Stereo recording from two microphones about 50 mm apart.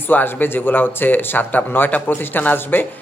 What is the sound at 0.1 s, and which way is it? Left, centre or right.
Speech, left.